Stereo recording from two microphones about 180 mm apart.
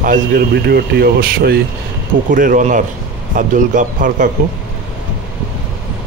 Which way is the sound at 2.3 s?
45° right (ahead or behind).